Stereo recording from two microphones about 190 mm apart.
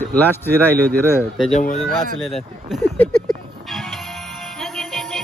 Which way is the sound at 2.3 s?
Centre (ahead or behind).